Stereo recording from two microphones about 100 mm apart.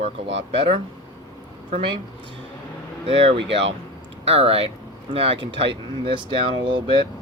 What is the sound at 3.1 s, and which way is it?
Speech, 70° right (ahead or behind).